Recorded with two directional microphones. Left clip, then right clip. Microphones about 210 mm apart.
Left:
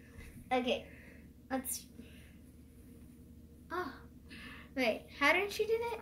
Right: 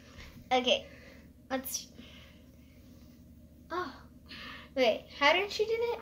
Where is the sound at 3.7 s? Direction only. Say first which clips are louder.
Right 3 dB; centre (ahead or behind).